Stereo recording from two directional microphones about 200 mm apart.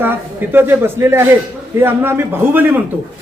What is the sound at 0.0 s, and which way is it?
Speech, 10° right (ahead or behind).